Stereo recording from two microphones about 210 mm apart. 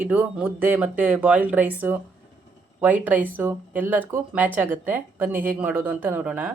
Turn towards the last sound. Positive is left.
turn(degrees=-5)  # may be behind; listen again after turning